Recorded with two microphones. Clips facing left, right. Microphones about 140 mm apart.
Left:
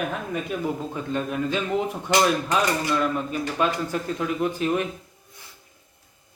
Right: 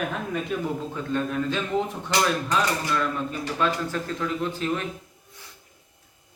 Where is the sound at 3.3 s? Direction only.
15° left (ahead or behind).